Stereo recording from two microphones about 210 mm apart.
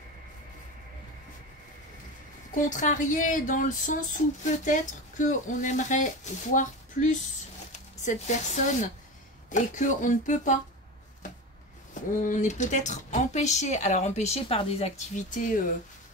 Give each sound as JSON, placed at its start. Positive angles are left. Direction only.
{"t": 2.7, "sound": "speech", "side_deg": 35}
{"t": 11.9, "sound": "speech", "side_deg": 40}